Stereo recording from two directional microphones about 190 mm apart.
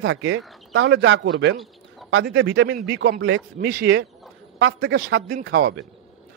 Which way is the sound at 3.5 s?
55° right (ahead or behind).